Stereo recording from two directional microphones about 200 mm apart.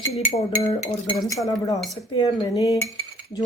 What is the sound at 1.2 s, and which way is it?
Cutlery, 15° left (ahead or behind).